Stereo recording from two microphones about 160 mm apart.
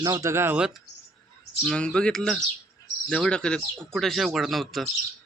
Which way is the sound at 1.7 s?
5° left (ahead or behind).